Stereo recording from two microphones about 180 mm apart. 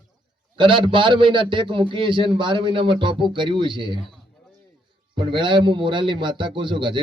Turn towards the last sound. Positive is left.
turn(degrees=-25)  # may be behind; listen again after turning